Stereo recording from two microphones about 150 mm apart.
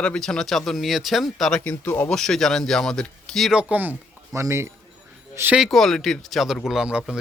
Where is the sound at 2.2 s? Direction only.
5° left (ahead or behind).